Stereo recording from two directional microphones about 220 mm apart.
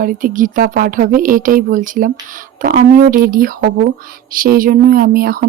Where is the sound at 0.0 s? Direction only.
40° right (ahead or behind).